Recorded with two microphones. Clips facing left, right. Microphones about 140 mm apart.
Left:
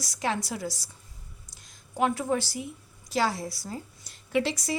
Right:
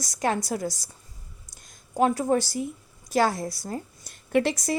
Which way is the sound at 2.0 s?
40° right (ahead or behind).